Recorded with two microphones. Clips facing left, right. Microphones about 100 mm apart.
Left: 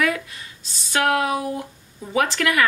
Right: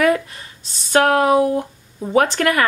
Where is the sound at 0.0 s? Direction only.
40° right (ahead or behind).